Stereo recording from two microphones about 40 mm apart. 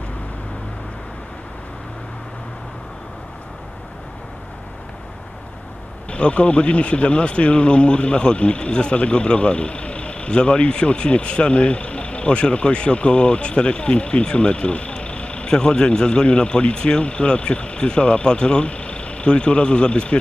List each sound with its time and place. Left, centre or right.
6.0 s speech: left
15.5 s speech: centre